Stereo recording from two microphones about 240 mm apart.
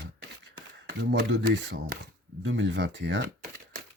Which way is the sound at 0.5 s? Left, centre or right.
Right.